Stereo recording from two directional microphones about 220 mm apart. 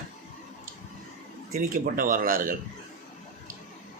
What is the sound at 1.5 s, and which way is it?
Speech, 40° right (ahead or behind).